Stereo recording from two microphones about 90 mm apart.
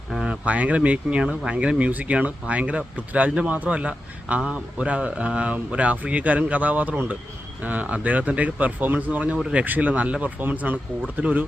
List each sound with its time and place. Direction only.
0.1 s speech: 10° right (ahead or behind)